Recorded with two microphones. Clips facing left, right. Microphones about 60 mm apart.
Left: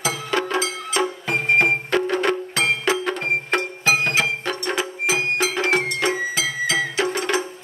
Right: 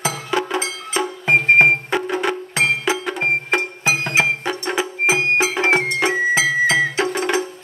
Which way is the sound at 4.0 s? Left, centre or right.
Right.